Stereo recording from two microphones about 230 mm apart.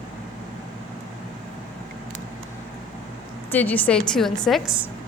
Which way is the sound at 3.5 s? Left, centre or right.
Centre.